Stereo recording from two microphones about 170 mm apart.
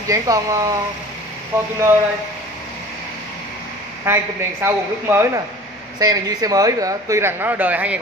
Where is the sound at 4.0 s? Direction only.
15° right (ahead or behind).